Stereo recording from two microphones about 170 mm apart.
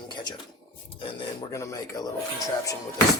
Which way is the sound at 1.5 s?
20° left (ahead or behind).